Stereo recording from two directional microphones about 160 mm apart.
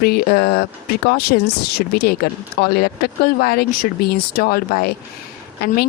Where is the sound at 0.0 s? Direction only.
70° left (ahead or behind).